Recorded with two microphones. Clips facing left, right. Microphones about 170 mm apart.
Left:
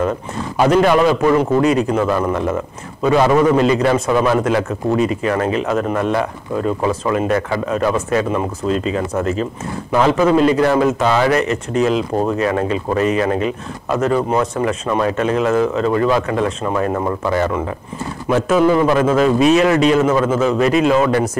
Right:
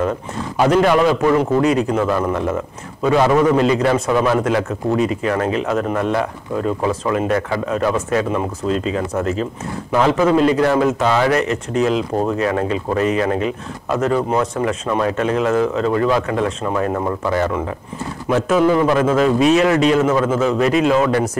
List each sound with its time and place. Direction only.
0.6 s a man's voice: 15° left (ahead or behind)
9.9 s a man's voice: 20° left (ahead or behind)
18.3 s a man's voice: 20° left (ahead or behind)